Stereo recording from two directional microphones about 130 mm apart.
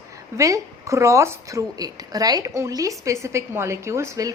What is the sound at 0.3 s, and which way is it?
A woman's voice, 25° right (ahead or behind).